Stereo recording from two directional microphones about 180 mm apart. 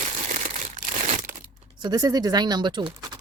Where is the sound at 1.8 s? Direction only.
20° right (ahead or behind).